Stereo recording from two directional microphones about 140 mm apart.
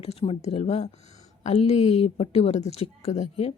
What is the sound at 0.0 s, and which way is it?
Speech, 45° left (ahead or behind).